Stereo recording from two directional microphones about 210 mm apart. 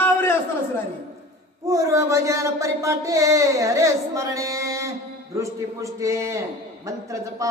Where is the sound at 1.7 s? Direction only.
15° right (ahead or behind).